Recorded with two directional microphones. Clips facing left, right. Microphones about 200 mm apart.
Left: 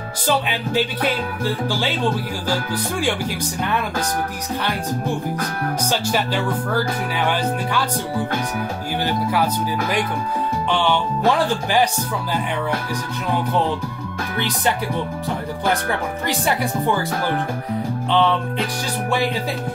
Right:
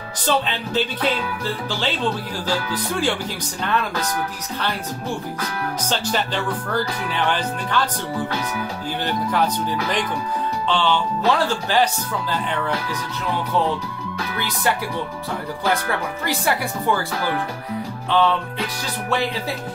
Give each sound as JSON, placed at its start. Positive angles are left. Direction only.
{"t": 0.3, "sound": "speech", "side_deg": 10}
{"t": 5.9, "sound": "speech", "side_deg": 10}
{"t": 9.0, "sound": "speech", "side_deg": 10}
{"t": 10.7, "sound": "speech", "side_deg": 15}
{"t": 18.1, "sound": "speech", "side_deg": 20}